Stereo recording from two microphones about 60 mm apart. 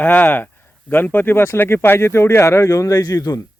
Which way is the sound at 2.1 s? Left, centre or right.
Left.